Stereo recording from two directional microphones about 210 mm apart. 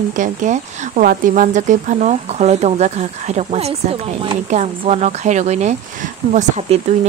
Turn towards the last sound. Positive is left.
turn(degrees=-35)  # may be behind; listen again after turning